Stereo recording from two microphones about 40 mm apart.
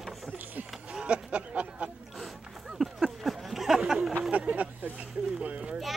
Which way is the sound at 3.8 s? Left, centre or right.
Centre.